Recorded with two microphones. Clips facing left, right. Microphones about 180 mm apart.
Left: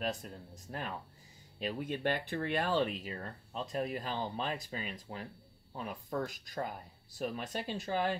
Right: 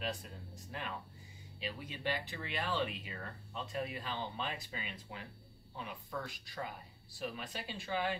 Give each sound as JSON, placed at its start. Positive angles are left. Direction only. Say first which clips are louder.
{"t": 0.0, "sound": "speech", "louder": "left 4 dB", "side_deg": 45}